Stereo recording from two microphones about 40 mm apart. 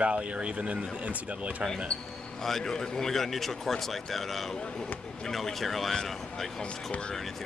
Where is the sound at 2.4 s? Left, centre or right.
Centre.